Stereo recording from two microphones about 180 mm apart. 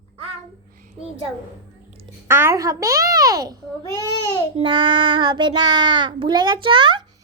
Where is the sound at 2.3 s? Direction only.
15° right (ahead or behind).